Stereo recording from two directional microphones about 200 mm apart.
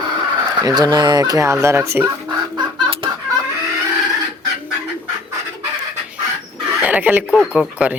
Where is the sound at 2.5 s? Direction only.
25° right (ahead or behind).